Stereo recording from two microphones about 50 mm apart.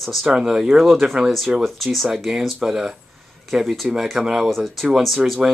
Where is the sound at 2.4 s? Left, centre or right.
Centre.